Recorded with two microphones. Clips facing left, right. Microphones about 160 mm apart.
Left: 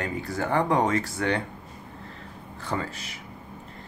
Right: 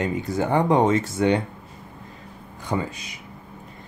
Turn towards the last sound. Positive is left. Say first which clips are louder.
# right 4 dB
turn(degrees=-15)  # may be behind; listen again after turning